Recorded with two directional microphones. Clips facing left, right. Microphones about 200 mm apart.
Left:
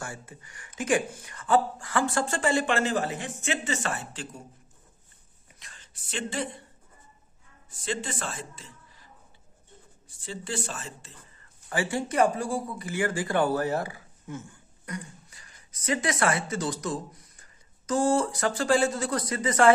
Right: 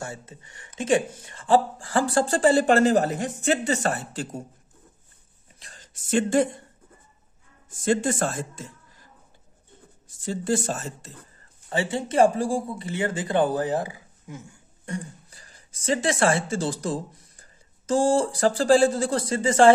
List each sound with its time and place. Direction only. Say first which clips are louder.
0.0 s speech: right 3 dB; 25° right (ahead or behind); by 4.4 s 40° right (ahead or behind)
5.6 s speech: right 4 dB; 40° right (ahead or behind)
7.7 s speech: right 10 dB; 45° right (ahead or behind)
11.7 s speech: right 3 dB; 25° right (ahead or behind)
14.9 s speech: right 5 dB; 35° right (ahead or behind)